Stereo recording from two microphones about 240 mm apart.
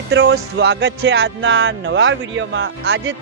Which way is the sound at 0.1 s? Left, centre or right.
Right.